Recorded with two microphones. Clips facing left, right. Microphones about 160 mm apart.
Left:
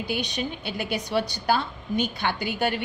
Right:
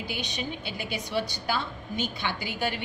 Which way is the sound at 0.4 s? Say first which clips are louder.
Left 4 dB; 60° left (ahead or behind).